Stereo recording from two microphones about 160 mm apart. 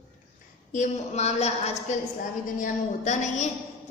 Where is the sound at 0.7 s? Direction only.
45° left (ahead or behind).